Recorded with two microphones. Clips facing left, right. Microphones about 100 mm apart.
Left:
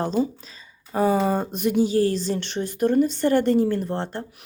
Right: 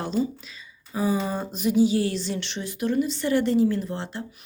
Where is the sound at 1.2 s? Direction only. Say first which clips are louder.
Left 5 dB; 55° left (ahead or behind).